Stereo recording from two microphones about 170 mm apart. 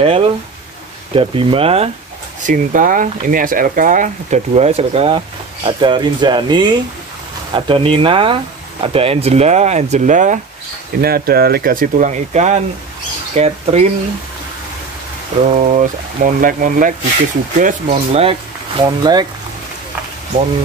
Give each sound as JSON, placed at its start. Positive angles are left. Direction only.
{"t": 0.0, "sound": "speech", "side_deg": -35}
{"t": 2.4, "sound": "speech", "side_deg": -50}
{"t": 11.0, "sound": "speech", "side_deg": -65}
{"t": 15.5, "sound": "speech", "side_deg": -45}
{"t": 17.6, "sound": "speech", "side_deg": -40}
{"t": 18.8, "sound": "speech", "side_deg": -25}